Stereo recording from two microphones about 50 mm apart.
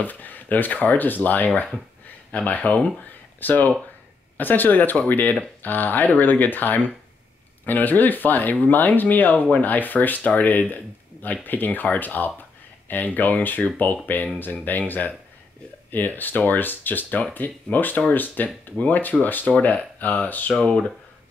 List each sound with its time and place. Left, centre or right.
0.0 s speech: left
20.5 s speech: centre